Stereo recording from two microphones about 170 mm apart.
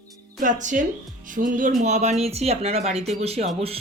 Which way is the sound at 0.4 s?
50° right (ahead or behind).